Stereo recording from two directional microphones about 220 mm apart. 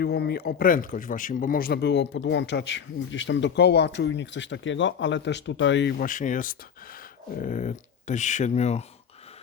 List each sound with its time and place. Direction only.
0.0 s a man's voice: 45° left (ahead or behind)
6.0 s speech: 35° left (ahead or behind)